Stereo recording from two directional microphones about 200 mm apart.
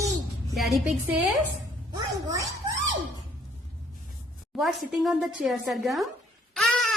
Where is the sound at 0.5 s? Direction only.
Centre (ahead or behind).